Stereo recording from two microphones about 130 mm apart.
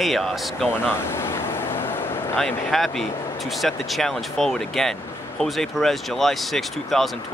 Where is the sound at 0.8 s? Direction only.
20° left (ahead or behind).